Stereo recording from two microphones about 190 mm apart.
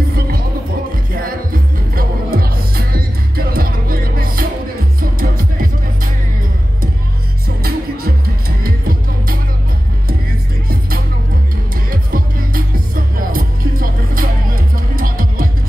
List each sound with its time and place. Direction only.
1.1 s music: 50° right (ahead or behind)
7.4 s music: 50° right (ahead or behind)
11.9 s music: 50° right (ahead or behind)